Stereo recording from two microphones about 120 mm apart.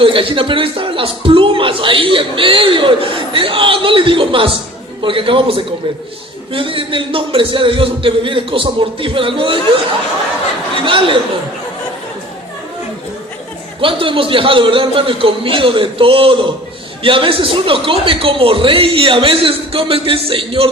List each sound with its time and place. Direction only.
0.0 s a man's voice: 45° right (ahead or behind)
10.8 s a man's voice: 45° right (ahead or behind)
13.8 s a man's voice: 45° right (ahead or behind)